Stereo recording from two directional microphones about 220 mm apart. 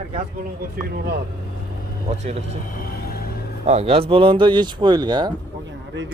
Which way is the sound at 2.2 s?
30° right (ahead or behind).